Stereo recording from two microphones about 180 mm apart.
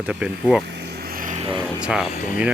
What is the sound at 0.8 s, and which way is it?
Vehicle, 65° right (ahead or behind).